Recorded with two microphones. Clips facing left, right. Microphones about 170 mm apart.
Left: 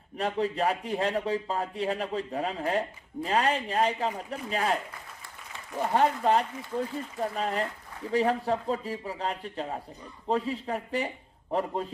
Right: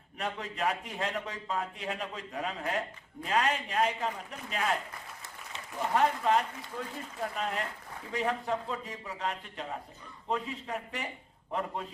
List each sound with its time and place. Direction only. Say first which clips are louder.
0.2 s speech: left 7 dB; 35° left (ahead or behind)
5.9 s speech: left 3 dB; 35° left (ahead or behind)